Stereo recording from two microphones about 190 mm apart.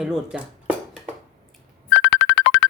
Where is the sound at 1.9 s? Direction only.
70° left (ahead or behind).